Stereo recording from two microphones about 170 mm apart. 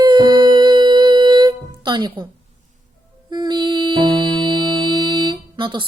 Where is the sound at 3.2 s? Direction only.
25° right (ahead or behind).